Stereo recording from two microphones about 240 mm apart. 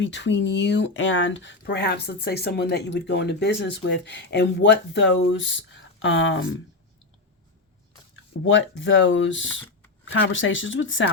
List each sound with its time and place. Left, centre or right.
0.0 s speech: left
8.4 s speech: left